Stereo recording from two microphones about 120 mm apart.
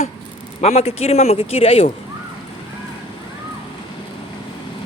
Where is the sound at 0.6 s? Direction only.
60° left (ahead or behind).